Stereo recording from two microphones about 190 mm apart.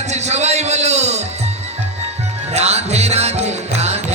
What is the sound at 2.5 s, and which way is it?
Speech, 35° right (ahead or behind).